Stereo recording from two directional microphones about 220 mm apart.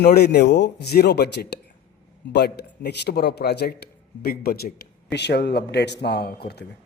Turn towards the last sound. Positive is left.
turn(degrees=45)  # may be behind; listen again after turning